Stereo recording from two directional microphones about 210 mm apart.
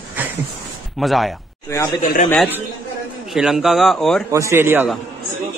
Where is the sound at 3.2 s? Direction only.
Centre (ahead or behind).